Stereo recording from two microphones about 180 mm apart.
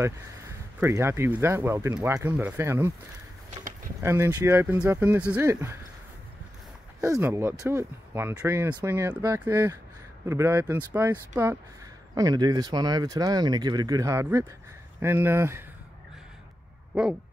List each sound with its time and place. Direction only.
0.7 s speech: 15° right (ahead or behind)
4.0 s speech: 15° right (ahead or behind)
7.0 s speech: 15° right (ahead or behind)